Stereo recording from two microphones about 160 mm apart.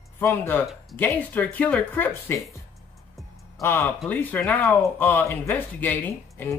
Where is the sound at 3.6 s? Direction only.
15° left (ahead or behind).